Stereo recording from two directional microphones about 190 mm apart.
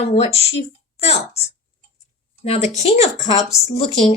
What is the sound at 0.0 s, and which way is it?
Speech, 35° left (ahead or behind).